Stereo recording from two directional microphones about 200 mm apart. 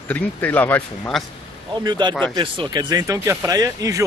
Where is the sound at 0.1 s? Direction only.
10° left (ahead or behind).